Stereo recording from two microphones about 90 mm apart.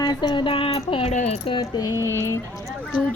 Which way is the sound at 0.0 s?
55° left (ahead or behind).